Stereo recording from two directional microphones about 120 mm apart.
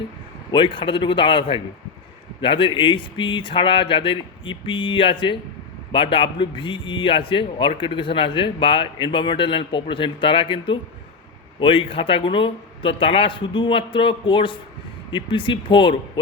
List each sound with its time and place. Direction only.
0.5 s speech: 45° left (ahead or behind)